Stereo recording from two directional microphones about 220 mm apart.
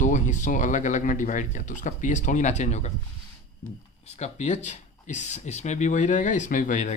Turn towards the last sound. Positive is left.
turn(degrees=35)  # may be behind; listen again after turning